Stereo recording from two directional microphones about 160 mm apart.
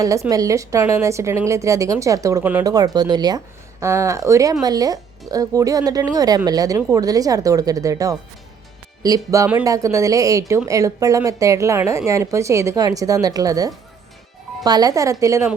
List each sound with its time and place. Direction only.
0.0 s speech: 20° right (ahead or behind)
2.6 s speech: 25° right (ahead or behind)